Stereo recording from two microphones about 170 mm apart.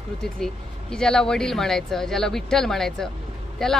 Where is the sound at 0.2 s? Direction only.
5° left (ahead or behind).